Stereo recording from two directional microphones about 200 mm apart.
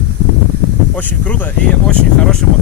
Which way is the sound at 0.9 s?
10° left (ahead or behind).